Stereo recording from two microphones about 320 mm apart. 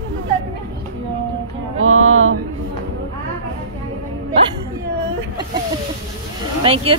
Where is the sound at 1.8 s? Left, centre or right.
Right.